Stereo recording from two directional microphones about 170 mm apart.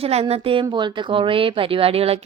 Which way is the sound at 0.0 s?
35° right (ahead or behind).